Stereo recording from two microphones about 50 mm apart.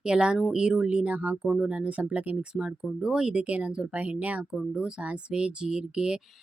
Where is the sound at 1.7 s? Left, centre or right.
Right.